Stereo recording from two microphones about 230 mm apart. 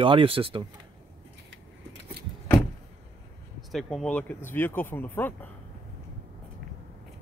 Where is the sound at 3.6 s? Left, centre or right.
Centre.